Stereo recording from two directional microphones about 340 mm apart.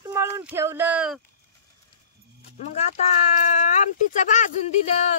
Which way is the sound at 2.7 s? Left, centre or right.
Centre.